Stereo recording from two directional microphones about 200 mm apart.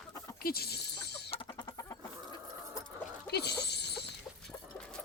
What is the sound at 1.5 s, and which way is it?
Chicken, 20° left (ahead or behind).